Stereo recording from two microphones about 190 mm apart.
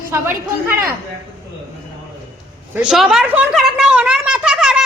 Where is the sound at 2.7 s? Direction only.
5° right (ahead or behind).